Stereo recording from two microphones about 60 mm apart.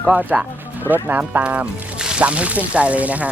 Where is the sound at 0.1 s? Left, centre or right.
Right.